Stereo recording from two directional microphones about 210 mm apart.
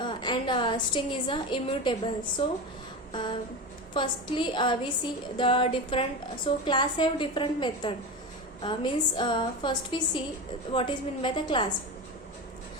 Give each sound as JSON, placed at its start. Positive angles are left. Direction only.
{"t": 0.0, "sound": "a woman's voice", "side_deg": 20}
{"t": 3.1, "sound": "a sound", "side_deg": 20}
{"t": 3.9, "sound": "a woman's voice", "side_deg": 20}